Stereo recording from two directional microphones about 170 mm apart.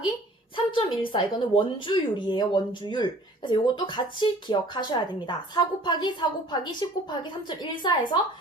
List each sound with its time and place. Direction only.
0.5 s speech: 30° left (ahead or behind)